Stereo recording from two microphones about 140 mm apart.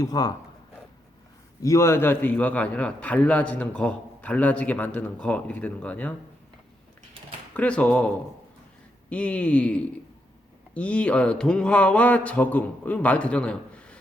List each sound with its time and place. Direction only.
0.0 s speech: 25° left (ahead or behind)
1.6 s a man's voice: 20° left (ahead or behind)
7.5 s a man's voice: 10° left (ahead or behind)